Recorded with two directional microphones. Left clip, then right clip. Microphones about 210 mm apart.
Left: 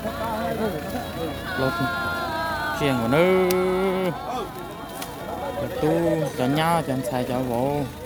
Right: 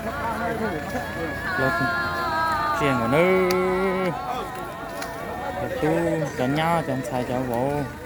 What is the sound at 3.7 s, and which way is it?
Music, 5° left (ahead or behind).